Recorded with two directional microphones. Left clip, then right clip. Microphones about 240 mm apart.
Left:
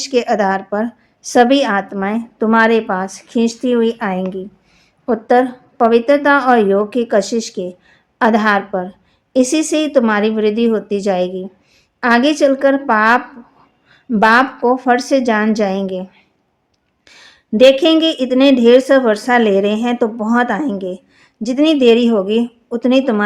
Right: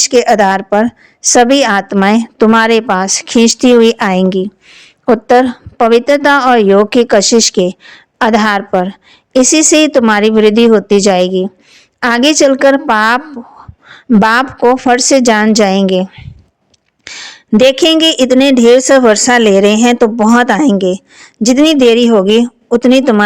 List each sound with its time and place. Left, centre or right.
0.0 s a woman's voice: right